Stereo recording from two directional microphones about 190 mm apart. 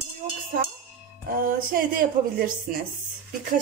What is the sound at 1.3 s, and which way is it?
Speech, 50° right (ahead or behind).